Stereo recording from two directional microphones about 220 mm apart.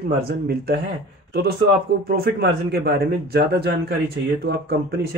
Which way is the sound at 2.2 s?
45° right (ahead or behind).